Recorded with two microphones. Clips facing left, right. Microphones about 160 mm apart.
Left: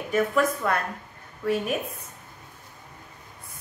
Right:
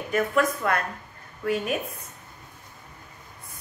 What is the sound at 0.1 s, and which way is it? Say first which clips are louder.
Speech: left 1 dB; centre (ahead or behind).